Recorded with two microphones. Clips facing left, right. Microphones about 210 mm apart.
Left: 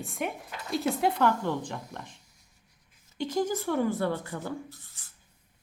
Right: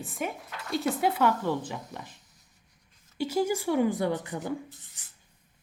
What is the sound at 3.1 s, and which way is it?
Speech, 10° right (ahead or behind).